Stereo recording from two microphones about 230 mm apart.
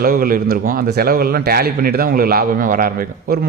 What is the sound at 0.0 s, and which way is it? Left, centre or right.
A man's voice, right.